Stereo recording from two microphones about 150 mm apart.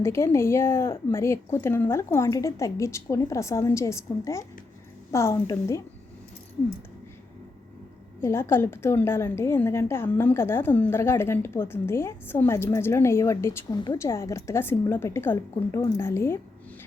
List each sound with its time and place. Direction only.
0.0 s a woman's voice: 15° left (ahead or behind)
8.2 s a woman's voice: 15° left (ahead or behind)
13.7 s a woman's voice: 30° left (ahead or behind)
14.0 s a woman's voice: 20° left (ahead or behind)